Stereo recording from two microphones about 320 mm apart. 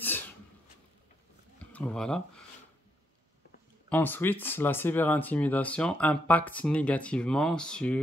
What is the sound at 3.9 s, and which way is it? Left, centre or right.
Speech, centre.